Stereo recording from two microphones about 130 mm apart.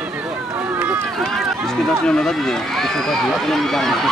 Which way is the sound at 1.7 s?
5° left (ahead or behind).